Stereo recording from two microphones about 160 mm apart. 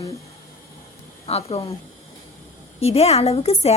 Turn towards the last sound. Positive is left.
turn(degrees=40)  # may be behind; listen again after turning